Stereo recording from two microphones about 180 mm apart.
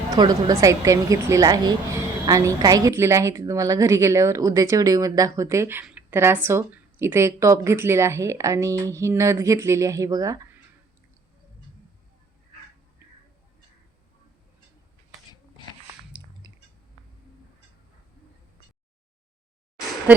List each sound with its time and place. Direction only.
0.2 s a woman's voice: 20° right (ahead or behind)
16.4 s chewing: 20° right (ahead or behind)